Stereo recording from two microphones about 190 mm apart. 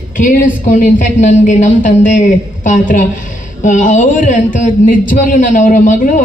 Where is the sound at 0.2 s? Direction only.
45° left (ahead or behind).